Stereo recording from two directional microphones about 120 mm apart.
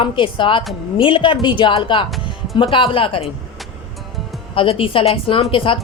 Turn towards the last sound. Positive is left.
turn(degrees=45)  # may be behind; listen again after turning